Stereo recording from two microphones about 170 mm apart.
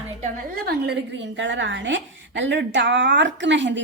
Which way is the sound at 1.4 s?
90° right.